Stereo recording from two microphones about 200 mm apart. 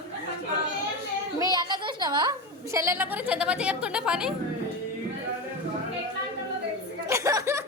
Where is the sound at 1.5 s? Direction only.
20° right (ahead or behind).